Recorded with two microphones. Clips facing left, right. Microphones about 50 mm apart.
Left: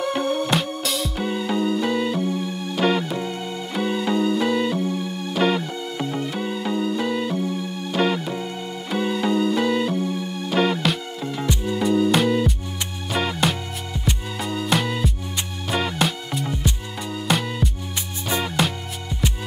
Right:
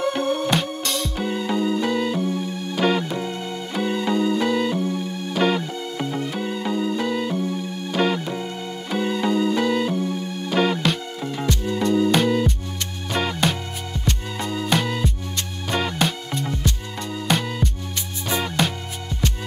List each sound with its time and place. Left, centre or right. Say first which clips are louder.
0.1 s music: even; centre